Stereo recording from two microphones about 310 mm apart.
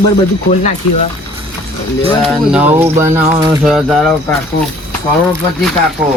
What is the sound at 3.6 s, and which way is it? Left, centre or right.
Speech, centre.